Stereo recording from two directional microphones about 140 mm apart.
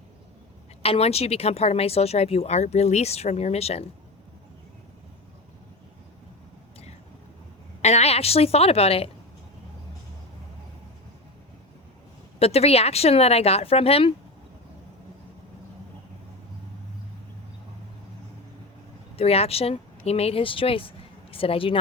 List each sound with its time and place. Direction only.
0.8 s speech: 45° left (ahead or behind)
7.8 s speech: 50° left (ahead or behind)
12.4 s speech: 45° left (ahead or behind)
19.1 s speech: 45° left (ahead or behind)